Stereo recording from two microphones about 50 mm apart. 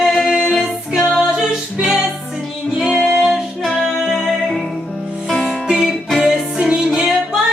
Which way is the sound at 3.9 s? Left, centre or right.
Centre.